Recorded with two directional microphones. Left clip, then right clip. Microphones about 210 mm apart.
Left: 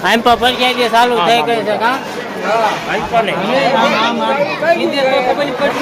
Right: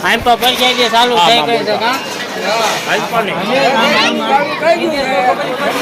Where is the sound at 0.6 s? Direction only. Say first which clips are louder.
Right 1 dB; centre (ahead or behind).